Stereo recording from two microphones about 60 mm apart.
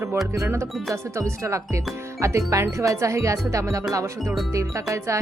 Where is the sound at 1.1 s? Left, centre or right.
Right.